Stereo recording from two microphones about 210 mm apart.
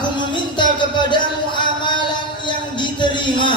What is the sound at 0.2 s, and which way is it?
Music, 20° left (ahead or behind).